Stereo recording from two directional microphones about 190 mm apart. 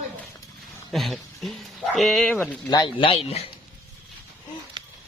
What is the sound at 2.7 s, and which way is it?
Speech, 25° left (ahead or behind).